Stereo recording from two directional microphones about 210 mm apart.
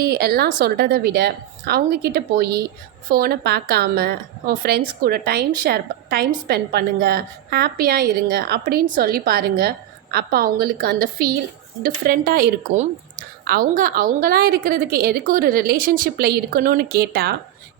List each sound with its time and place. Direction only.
0.0 s a woman's voice: 45° right (ahead or behind)